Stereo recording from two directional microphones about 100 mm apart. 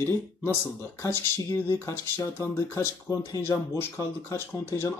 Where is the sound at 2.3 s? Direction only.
25° left (ahead or behind).